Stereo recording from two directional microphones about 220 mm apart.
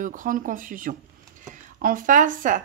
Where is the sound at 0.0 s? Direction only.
35° right (ahead or behind).